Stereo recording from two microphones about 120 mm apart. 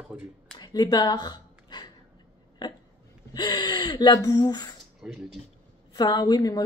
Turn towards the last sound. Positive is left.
turn(degrees=35)  # may be behind; listen again after turning